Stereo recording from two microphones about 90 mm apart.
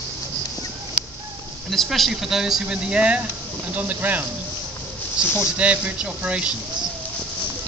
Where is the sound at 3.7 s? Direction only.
20° right (ahead or behind).